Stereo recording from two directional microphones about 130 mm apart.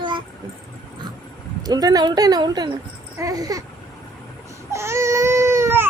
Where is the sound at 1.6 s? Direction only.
30° right (ahead or behind).